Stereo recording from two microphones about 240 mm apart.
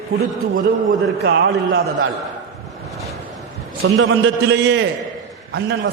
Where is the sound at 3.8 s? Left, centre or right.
Right.